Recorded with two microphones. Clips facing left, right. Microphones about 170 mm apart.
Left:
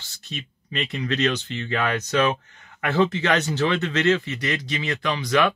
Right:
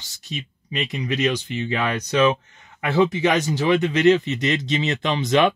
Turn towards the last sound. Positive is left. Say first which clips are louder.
# right 3 dB
turn(degrees=-20)  # may be behind; listen again after turning